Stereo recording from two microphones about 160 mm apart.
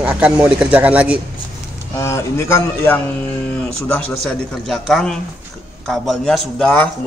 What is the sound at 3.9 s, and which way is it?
Speech, 5° left (ahead or behind).